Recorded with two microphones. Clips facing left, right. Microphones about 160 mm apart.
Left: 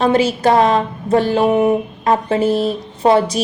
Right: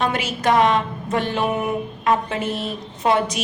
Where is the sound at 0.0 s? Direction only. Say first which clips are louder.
Left 8 dB; 30° left (ahead or behind).